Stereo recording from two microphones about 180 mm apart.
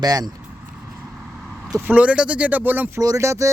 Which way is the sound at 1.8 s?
10° right (ahead or behind).